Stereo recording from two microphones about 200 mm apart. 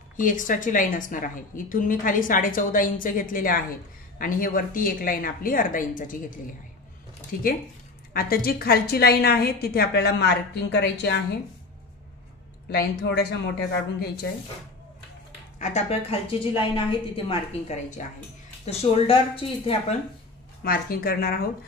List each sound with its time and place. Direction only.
0.2 s a woman's voice: 40° left (ahead or behind)
7.3 s a woman's voice: 45° left (ahead or behind)
12.6 s speech: 55° left (ahead or behind)
15.6 s a woman's voice: 30° left (ahead or behind)
20.6 s a woman's voice: 45° left (ahead or behind)